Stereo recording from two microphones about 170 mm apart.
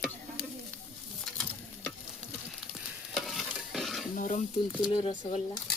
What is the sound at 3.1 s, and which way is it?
Stir, centre (ahead or behind).